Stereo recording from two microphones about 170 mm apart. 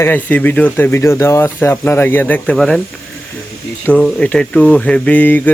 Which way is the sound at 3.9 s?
10° left (ahead or behind).